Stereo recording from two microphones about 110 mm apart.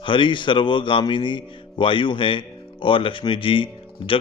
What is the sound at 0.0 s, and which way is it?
Speech, 50° left (ahead or behind).